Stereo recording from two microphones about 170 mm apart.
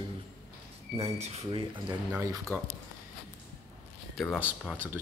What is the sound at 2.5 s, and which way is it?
Speech, 15° right (ahead or behind).